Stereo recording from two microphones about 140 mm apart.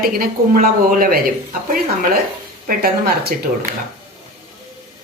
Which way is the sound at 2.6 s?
90° right.